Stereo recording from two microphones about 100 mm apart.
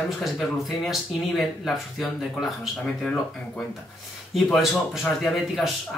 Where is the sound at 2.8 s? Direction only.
10° left (ahead or behind).